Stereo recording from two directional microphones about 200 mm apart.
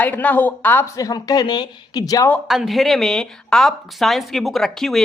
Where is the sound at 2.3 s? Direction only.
Centre (ahead or behind).